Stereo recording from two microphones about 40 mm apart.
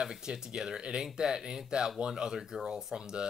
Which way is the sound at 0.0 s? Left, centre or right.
Centre.